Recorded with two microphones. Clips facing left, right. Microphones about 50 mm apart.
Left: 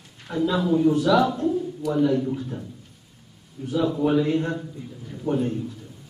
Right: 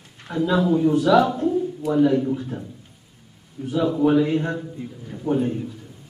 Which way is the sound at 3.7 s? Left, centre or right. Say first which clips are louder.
Right 3 dB; centre.